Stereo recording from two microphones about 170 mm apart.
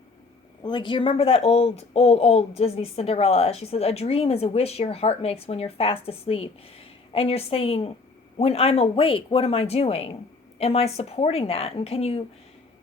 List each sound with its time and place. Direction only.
0.6 s speech: 30° left (ahead or behind)